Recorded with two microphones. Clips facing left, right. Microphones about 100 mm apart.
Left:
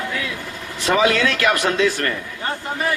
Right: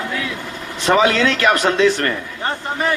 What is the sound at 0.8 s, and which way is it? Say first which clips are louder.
Speech: right 3 dB; 30° right (ahead or behind).